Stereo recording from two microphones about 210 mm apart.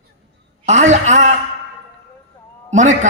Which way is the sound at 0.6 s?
35° right (ahead or behind).